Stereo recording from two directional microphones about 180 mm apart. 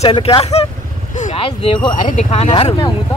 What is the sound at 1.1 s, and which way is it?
Vehicle, 45° left (ahead or behind).